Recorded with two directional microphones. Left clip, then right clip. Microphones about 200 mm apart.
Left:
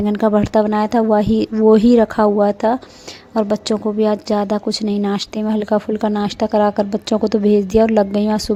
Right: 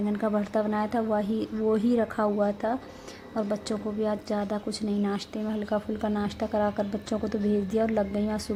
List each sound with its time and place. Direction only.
0.0 s a woman's voice: 40° left (ahead or behind)